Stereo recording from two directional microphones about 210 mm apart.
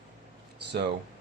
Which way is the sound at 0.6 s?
55° right (ahead or behind).